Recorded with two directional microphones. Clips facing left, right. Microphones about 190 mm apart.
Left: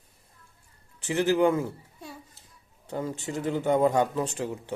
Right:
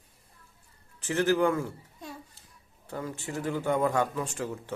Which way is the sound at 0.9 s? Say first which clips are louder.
Left 2 dB; 15° left (ahead or behind).